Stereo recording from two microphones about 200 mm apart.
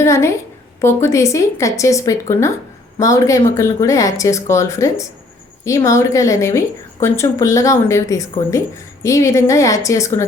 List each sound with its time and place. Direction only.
0.0 s a woman's voice: 15° left (ahead or behind)